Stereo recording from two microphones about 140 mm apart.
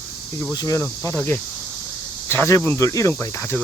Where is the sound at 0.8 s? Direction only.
15° left (ahead or behind).